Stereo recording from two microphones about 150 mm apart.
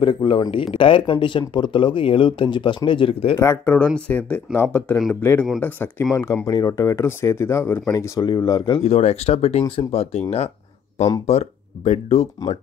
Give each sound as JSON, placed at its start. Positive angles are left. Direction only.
{"t": 0.0, "sound": "speech", "side_deg": 35}
{"t": 3.3, "sound": "speech", "side_deg": 15}
{"t": 11.2, "sound": "speech", "side_deg": 45}